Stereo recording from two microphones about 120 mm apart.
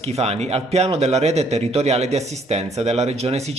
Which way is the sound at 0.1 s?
60° right (ahead or behind).